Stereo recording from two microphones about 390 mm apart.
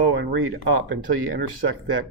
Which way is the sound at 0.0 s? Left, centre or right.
Right.